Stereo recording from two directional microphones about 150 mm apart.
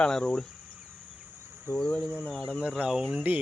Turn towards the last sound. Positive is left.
turn(degrees=-10)  # may be behind; listen again after turning